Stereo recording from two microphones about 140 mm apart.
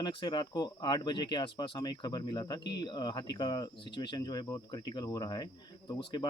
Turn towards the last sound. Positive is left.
turn(degrees=30)  # may be behind; listen again after turning